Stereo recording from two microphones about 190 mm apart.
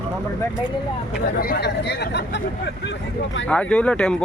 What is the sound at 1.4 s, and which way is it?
Speech, 55° left (ahead or behind).